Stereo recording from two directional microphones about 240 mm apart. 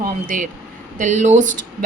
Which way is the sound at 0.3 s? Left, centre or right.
Right.